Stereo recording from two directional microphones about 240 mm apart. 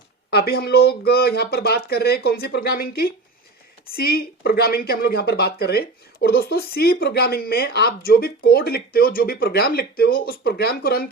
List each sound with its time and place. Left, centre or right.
0.3 s speech: left